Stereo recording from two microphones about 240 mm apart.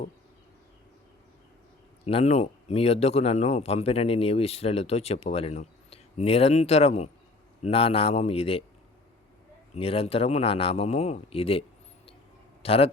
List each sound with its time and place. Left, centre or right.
2.0 s speech: left
9.7 s speech: left
12.6 s speech: left